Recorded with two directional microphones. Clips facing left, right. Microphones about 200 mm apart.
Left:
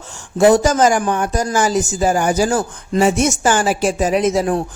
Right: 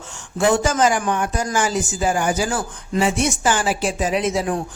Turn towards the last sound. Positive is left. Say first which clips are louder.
# left 5 dB
turn(degrees=40)  # may be behind; listen again after turning